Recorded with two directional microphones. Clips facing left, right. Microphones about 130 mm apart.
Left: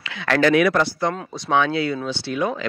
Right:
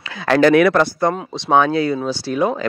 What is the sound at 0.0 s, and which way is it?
Speech, 35° right (ahead or behind).